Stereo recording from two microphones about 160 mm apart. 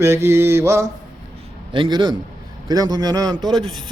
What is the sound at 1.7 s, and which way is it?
A man's voice, 30° right (ahead or behind).